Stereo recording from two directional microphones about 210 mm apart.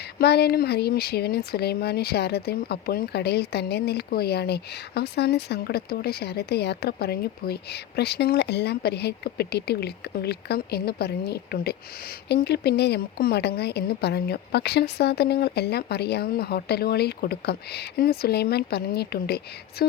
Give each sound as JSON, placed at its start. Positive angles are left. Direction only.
{"t": 0.2, "sound": "speech", "side_deg": 50}